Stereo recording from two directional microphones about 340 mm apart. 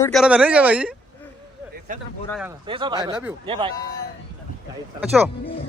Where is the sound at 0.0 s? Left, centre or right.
Centre.